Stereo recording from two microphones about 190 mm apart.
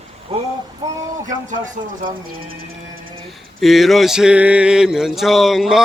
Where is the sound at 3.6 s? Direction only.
Centre (ahead or behind).